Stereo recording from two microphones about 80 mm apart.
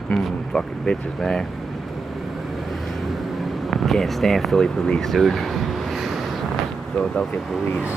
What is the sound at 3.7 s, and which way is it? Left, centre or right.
Speech, centre.